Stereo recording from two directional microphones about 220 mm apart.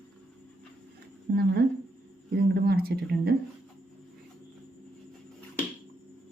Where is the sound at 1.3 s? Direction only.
45° right (ahead or behind).